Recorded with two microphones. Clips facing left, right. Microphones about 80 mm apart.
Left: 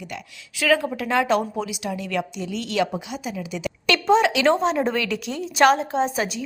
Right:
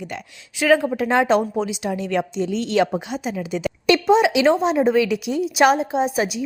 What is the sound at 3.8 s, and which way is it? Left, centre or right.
A woman's voice, centre.